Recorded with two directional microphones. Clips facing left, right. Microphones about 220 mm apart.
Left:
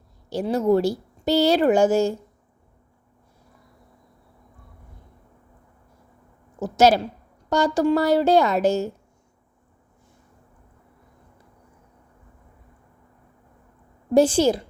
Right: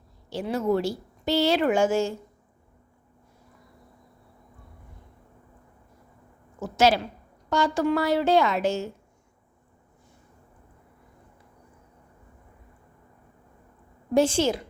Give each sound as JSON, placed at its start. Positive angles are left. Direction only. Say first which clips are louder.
{"t": 0.3, "sound": "speech", "louder": "left 5 dB", "side_deg": 40}
{"t": 6.6, "sound": "speech", "louder": "left 4 dB", "side_deg": 40}
{"t": 14.1, "sound": "speech", "louder": "left 5 dB", "side_deg": 35}